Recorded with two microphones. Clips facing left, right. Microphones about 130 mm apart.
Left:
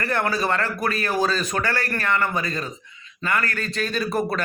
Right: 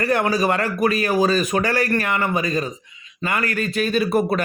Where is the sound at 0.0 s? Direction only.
20° right (ahead or behind).